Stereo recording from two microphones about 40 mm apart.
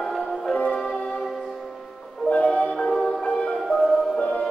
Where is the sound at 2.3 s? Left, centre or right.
Left.